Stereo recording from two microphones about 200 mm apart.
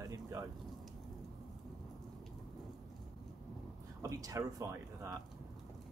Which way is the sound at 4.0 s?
15° right (ahead or behind).